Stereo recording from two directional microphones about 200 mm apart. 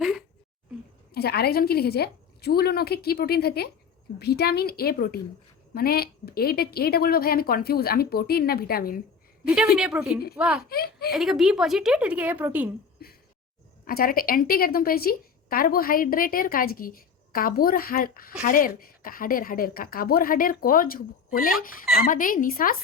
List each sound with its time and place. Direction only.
0.0 s a sound: centre (ahead or behind)
1.1 s a woman's voice: 50° left (ahead or behind)
9.7 s a woman's voice: 5° right (ahead or behind)
10.7 s a woman's voice: 50° left (ahead or behind)
11.1 s a woman's voice: centre (ahead or behind)
13.0 s a sound: 50° left (ahead or behind)
13.8 s a woman's voice: 45° left (ahead or behind)